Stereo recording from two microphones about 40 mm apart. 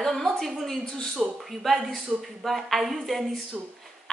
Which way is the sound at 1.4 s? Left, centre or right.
Centre.